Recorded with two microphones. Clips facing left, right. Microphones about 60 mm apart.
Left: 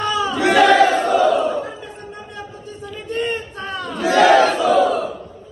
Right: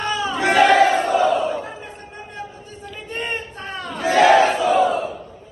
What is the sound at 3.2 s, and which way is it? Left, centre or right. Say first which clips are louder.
Battle cry: left 4 dB; right.